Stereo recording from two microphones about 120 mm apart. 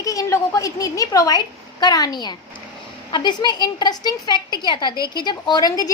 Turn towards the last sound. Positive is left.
turn(degrees=30)  # may be behind; listen again after turning